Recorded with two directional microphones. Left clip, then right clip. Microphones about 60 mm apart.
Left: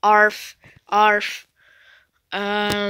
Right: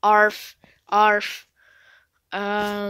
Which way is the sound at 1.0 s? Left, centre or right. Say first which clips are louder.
Left 2 dB; right.